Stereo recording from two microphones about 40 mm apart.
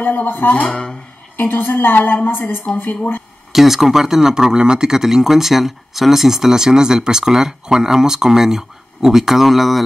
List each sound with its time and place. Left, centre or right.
0.0 s music: left
0.5 s speech: left
1.3 s a woman's voice: left
3.5 s speech: centre